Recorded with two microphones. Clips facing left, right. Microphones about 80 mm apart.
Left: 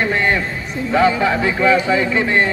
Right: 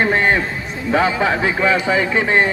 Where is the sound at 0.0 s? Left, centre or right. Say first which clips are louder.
Right 2 dB; right.